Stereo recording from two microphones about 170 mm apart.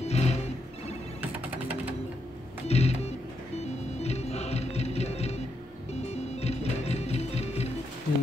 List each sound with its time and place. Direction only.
0.0 s music: 40° left (ahead or behind)
1.2 s music: 10° right (ahead or behind)
2.7 s music: 40° left (ahead or behind)